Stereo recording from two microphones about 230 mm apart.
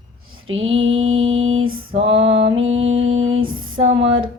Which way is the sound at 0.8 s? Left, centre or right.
Right.